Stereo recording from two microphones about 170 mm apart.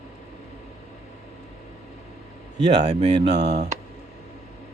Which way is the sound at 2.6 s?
25° right (ahead or behind).